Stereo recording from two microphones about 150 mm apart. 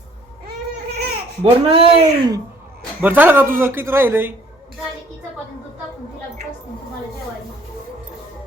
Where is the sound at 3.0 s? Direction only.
10° right (ahead or behind).